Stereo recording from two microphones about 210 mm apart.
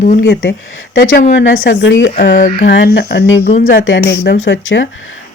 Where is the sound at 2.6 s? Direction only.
55° left (ahead or behind).